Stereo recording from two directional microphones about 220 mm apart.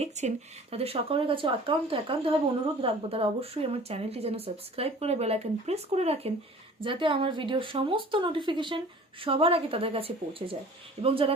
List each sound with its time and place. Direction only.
0.0 s speech: 30° right (ahead or behind)